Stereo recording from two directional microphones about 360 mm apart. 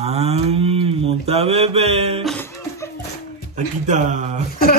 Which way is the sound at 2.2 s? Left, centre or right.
Centre.